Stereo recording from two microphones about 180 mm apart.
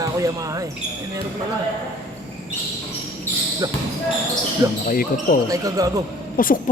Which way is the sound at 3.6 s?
20° right (ahead or behind).